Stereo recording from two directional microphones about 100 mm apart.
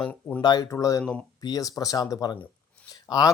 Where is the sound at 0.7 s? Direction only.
30° left (ahead or behind).